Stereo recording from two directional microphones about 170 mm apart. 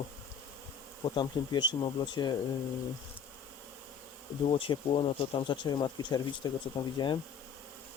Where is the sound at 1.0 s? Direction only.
25° left (ahead or behind).